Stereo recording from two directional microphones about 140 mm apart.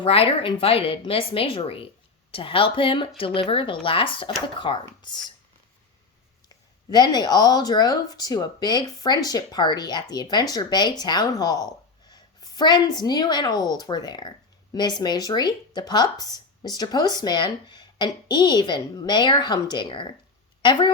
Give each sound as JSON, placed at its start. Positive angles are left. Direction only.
{"t": 0.0, "sound": "speech", "side_deg": 40}
{"t": 6.9, "sound": "speech", "side_deg": 30}